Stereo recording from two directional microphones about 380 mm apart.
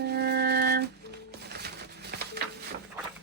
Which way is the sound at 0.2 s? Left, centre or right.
Right.